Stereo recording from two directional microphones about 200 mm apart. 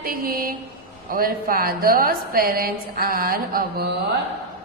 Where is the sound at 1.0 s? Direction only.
45° right (ahead or behind).